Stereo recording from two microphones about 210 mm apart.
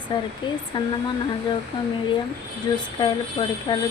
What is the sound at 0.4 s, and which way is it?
Speech, 20° left (ahead or behind).